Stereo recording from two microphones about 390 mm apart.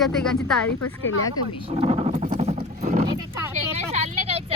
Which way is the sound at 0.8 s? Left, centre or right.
Left.